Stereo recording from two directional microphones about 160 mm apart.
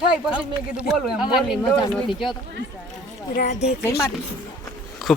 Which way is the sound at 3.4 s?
75° left (ahead or behind).